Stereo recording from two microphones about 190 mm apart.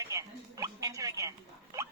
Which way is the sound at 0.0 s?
15° right (ahead or behind).